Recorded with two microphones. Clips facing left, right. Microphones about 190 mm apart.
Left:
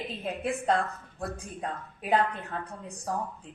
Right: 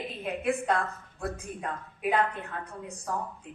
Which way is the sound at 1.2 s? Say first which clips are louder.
Right 1 dB; 35° left (ahead or behind).